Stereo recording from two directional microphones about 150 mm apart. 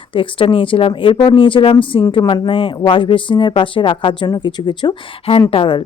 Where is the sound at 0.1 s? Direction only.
35° left (ahead or behind).